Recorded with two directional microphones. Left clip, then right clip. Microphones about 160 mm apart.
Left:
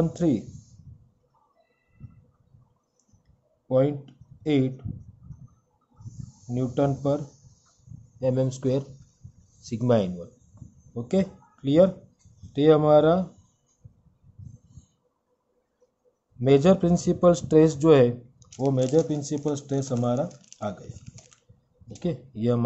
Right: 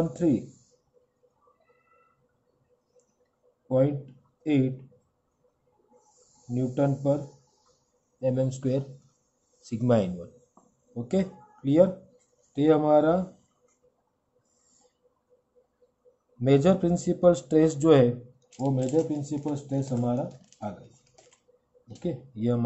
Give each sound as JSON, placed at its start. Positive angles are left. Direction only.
{"t": 0.1, "sound": "speech", "side_deg": 30}
{"t": 3.6, "sound": "speech", "side_deg": 30}
{"t": 6.5, "sound": "speech", "side_deg": 30}
{"t": 8.2, "sound": "speech", "side_deg": 30}
{"t": 16.3, "sound": "speech", "side_deg": 20}
{"t": 18.6, "sound": "speech", "side_deg": 50}
{"t": 22.0, "sound": "speech", "side_deg": 30}